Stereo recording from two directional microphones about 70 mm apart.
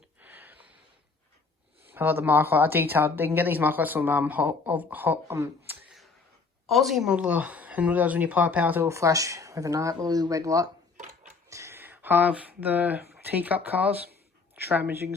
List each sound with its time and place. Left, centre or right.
0.2 s a sound: right
1.9 s a woman's voice: right
6.7 s a woman's voice: centre; by 8.9 s right
8.9 s speech: right
9.9 s speech: right
11.4 s a sound: right
11.8 s a woman's voice: right